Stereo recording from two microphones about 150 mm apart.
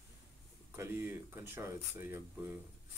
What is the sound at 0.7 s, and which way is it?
Speech, 15° right (ahead or behind).